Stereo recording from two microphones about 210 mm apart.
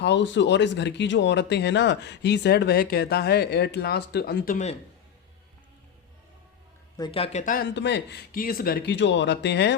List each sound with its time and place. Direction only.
0.0 s speech: 55° left (ahead or behind); by 4.8 s 35° left (ahead or behind)
6.9 s speech: 20° left (ahead or behind)
7.4 s speech: 40° left (ahead or behind)
7.7 s speech: 55° left (ahead or behind)